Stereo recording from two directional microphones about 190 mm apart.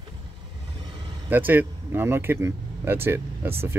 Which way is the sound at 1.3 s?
10° right (ahead or behind).